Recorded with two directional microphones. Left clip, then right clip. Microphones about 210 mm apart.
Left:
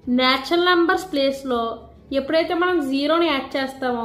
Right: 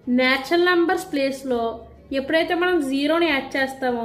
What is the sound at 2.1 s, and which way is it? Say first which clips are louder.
A woman's voice: left 1 dB; 15° left (ahead or behind).